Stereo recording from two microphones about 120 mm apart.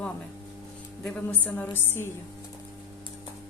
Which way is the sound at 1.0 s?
10° left (ahead or behind).